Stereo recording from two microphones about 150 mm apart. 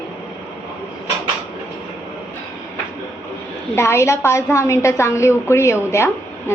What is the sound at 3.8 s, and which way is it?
A woman's voice, 15° left (ahead or behind).